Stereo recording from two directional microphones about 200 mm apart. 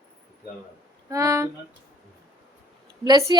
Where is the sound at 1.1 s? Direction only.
15° right (ahead or behind).